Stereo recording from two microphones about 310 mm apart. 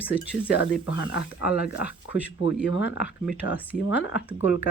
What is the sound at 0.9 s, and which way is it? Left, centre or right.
Speech, left.